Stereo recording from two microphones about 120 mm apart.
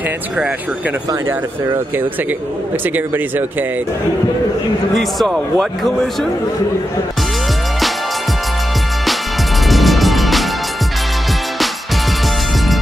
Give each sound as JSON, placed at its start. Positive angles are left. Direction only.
{"t": 4.9, "sound": "a man's voice", "side_deg": 5}
{"t": 9.7, "sound": "music", "side_deg": 0}